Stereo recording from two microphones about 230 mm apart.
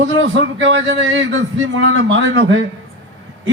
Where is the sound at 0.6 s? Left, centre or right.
Right.